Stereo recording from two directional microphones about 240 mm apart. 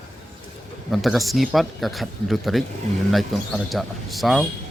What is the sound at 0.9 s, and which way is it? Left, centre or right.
Speech, centre.